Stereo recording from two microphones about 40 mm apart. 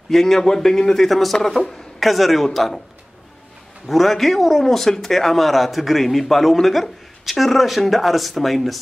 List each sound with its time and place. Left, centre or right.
0.1 s a man's voice: centre
3.8 s a man's voice: centre